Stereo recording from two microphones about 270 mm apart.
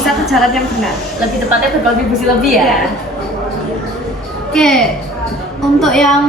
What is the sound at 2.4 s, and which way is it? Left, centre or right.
Speech, centre.